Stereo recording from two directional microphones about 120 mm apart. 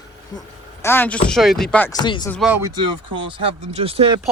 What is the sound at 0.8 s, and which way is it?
Speech, 20° left (ahead or behind).